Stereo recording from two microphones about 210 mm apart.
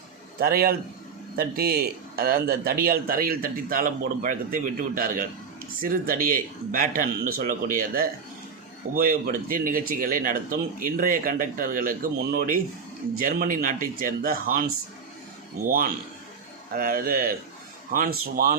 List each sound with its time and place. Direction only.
0.3 s speech: 45° right (ahead or behind)
15.6 s speech: 40° right (ahead or behind)